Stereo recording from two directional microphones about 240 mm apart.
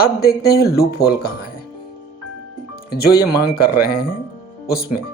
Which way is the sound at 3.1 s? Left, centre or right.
Left.